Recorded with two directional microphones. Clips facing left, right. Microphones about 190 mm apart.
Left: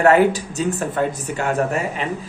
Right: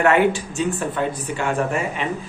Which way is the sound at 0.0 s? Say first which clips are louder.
Left 3 dB; 40° left (ahead or behind).